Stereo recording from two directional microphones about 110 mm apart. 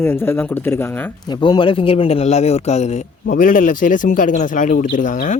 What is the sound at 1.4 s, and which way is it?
Speech, 45° left (ahead or behind).